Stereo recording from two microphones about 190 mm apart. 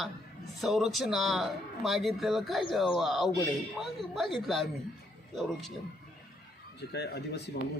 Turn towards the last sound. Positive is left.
turn(degrees=65)  # may be behind; listen again after turning